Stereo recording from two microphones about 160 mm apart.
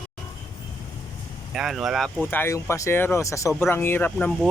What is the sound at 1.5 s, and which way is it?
Speech, centre (ahead or behind).